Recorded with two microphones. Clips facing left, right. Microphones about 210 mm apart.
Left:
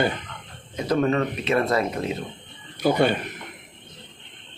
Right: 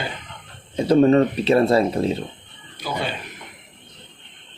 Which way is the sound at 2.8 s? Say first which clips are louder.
Left 8 dB; 55° left (ahead or behind).